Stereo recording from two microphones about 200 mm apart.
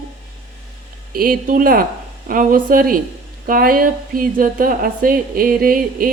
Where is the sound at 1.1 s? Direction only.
45° right (ahead or behind).